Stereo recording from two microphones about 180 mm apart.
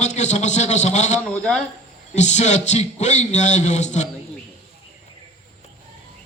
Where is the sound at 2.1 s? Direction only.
40° left (ahead or behind).